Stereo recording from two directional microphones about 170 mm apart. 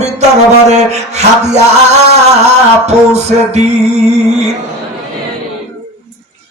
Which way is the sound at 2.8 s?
40° right (ahead or behind).